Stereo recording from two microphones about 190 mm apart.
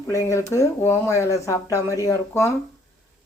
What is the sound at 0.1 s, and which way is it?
Speech, 15° left (ahead or behind).